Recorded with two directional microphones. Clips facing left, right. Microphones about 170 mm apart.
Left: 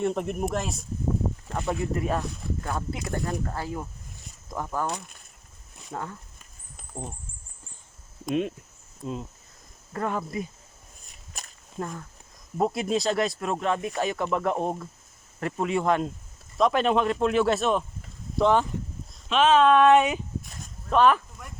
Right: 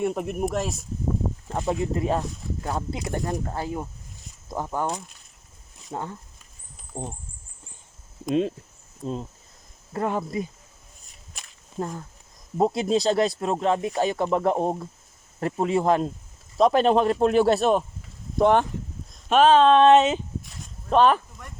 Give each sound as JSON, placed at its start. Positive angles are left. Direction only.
{"t": 0.0, "sound": "speech", "side_deg": -5}
{"t": 1.5, "sound": "speech", "side_deg": -20}
{"t": 9.9, "sound": "speech", "side_deg": -25}
{"t": 11.8, "sound": "speech", "side_deg": -25}
{"t": 18.3, "sound": "speech", "side_deg": -55}
{"t": 19.3, "sound": "speech", "side_deg": -35}
{"t": 21.4, "sound": "speech", "side_deg": 5}